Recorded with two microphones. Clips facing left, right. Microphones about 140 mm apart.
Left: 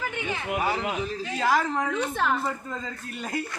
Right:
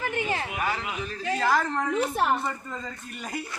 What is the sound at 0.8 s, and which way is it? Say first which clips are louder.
Speech: left 5 dB; 40° left (ahead or behind).